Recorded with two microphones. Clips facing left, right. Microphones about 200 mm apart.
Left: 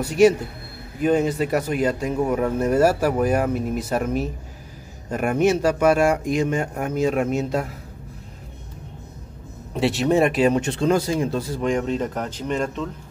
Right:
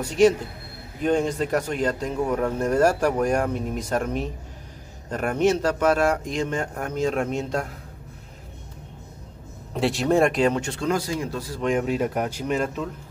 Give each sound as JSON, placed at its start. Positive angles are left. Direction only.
{"t": 0.0, "sound": "speech", "side_deg": 10}
{"t": 9.8, "sound": "speech", "side_deg": 0}
{"t": 10.6, "sound": "speech", "side_deg": 25}
{"t": 11.6, "sound": "speech", "side_deg": -5}